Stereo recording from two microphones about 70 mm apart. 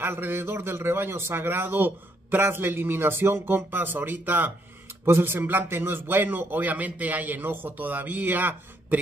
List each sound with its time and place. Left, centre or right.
0.0 s a man's voice: right